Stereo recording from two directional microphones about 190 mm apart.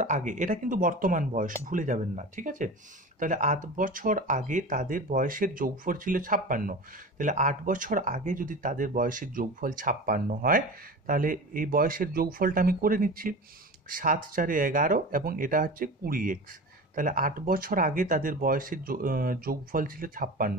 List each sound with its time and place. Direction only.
0.0 s speech: 40° right (ahead or behind)